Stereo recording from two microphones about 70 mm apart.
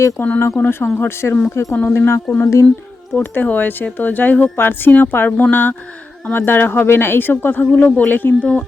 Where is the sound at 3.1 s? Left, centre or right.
Left.